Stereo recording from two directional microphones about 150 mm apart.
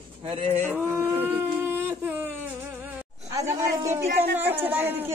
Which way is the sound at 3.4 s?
20° right (ahead or behind).